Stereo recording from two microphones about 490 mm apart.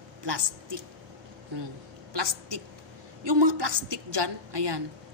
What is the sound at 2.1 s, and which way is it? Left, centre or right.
A woman's voice, right.